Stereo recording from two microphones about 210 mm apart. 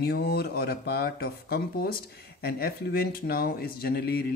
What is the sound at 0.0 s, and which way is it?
Speech, 50° left (ahead or behind).